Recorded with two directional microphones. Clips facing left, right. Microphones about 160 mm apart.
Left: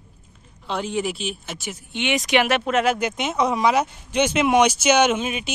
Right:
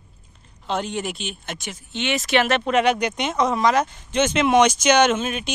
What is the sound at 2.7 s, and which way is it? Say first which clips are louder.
Speech: right 1 dB; centre (ahead or behind).